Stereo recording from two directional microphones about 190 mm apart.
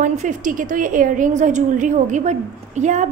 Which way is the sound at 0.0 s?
40° right (ahead or behind).